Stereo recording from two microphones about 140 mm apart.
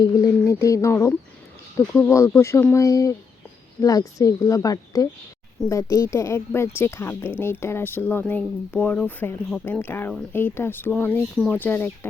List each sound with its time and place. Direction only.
0.0 s speech: 25° left (ahead or behind)